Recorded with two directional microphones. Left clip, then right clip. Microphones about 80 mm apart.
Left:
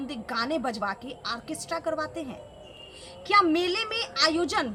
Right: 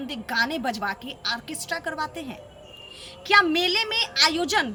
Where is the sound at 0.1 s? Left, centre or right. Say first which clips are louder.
Right 5 dB; left.